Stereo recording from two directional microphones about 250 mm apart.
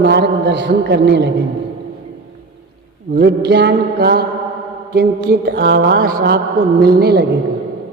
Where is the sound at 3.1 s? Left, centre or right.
Right.